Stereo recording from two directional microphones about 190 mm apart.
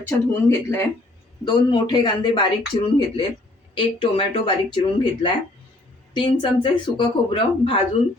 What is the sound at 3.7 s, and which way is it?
Speech, 25° left (ahead or behind).